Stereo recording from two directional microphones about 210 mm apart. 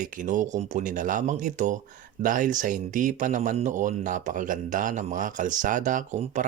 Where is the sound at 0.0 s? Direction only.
40° right (ahead or behind).